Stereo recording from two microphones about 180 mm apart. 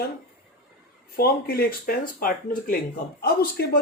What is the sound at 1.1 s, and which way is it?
Speech, 60° left (ahead or behind).